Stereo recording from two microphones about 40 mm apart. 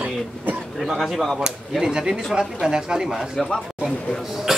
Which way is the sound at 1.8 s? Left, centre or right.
Centre.